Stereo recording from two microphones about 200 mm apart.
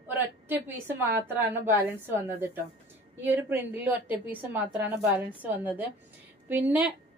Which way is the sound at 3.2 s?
10° right (ahead or behind).